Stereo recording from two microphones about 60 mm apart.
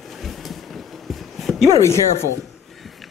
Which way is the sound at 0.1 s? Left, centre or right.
Centre.